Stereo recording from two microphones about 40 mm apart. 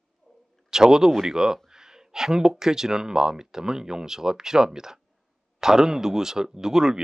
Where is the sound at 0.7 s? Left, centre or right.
Centre.